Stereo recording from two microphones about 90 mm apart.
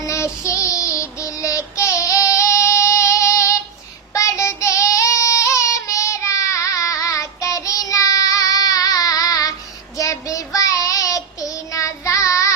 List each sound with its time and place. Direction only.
0.0 s child singing: 35° left (ahead or behind)